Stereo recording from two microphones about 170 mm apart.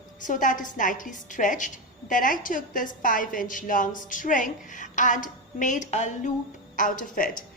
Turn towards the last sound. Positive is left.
turn(degrees=55)  # may be behind; listen again after turning